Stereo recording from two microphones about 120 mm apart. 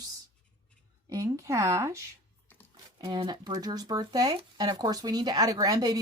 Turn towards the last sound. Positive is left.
turn(degrees=-30)  # may be behind; listen again after turning